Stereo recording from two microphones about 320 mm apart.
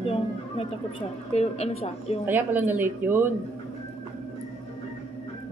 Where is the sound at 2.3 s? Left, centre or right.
Centre.